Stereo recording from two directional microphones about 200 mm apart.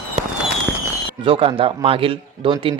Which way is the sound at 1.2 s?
25° right (ahead or behind).